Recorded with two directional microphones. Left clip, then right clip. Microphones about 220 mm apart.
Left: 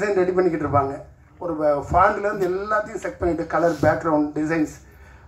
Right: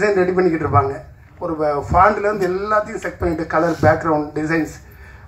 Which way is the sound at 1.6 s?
60° left (ahead or behind).